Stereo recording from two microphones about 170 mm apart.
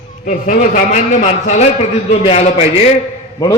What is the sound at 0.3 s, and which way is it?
A man's voice, 50° left (ahead or behind).